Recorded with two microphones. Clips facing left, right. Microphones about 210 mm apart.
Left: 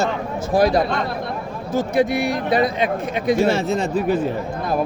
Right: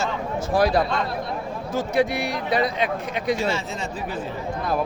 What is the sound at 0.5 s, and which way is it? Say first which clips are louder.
A man's voice: left 3 dB; 45° left (ahead or behind).